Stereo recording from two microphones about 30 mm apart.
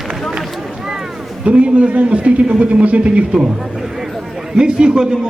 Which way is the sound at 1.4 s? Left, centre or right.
Right.